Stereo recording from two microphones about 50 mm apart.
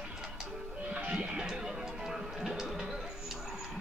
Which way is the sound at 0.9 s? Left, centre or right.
Right.